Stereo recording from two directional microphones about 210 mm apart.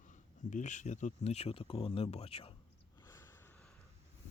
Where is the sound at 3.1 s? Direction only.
15° left (ahead or behind).